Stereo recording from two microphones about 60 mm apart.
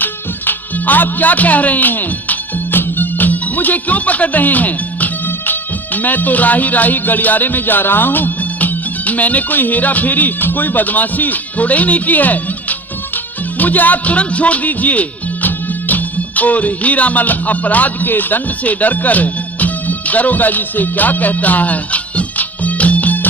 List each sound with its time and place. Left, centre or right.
0.0 s speech: left